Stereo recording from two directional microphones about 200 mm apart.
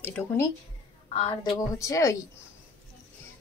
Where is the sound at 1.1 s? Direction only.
30° left (ahead or behind).